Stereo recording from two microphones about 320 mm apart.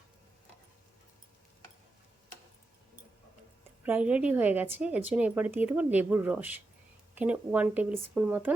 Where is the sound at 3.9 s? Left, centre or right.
Centre.